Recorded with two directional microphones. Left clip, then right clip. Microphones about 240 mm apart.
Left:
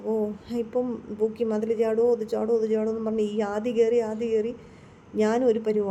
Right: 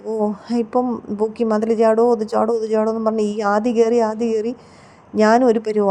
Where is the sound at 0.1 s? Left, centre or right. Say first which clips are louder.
Right 7 dB; right.